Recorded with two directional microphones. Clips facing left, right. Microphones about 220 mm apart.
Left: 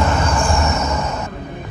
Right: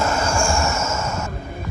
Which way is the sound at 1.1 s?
Centre (ahead or behind).